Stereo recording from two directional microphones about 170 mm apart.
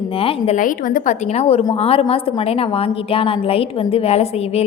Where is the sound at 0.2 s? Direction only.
35° left (ahead or behind).